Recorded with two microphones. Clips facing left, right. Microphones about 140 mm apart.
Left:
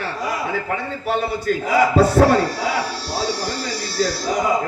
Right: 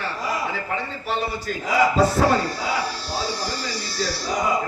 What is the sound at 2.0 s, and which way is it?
Speech, 65° left (ahead or behind).